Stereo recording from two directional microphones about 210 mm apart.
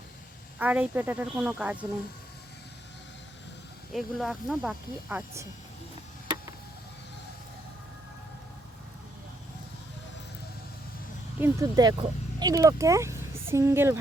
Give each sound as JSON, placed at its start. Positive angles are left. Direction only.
{"t": 0.6, "sound": "speech", "side_deg": -10}
{"t": 3.9, "sound": "speech", "side_deg": 0}
{"t": 11.3, "sound": "speech", "side_deg": -15}